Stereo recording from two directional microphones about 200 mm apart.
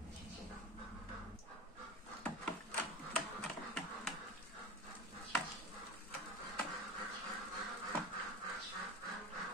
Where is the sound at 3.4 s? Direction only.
5° left (ahead or behind).